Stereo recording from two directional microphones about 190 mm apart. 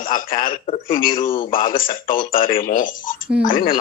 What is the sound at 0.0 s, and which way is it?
A man's voice, 45° left (ahead or behind).